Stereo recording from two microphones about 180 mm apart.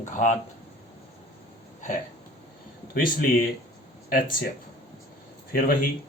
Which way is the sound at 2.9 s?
50° left (ahead or behind).